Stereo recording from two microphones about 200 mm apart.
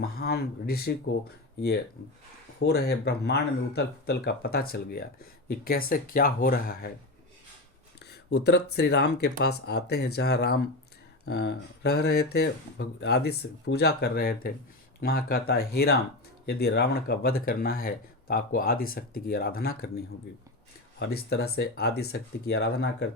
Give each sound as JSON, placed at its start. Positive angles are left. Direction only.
{"t": 0.0, "sound": "speech", "side_deg": 50}
{"t": 2.6, "sound": "speech", "side_deg": 55}
{"t": 8.1, "sound": "speech", "side_deg": 55}